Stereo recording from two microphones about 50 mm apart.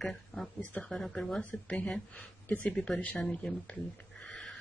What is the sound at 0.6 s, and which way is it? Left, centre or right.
Speech, left.